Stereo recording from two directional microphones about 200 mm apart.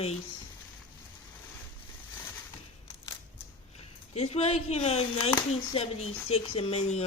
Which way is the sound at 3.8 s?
35° left (ahead or behind).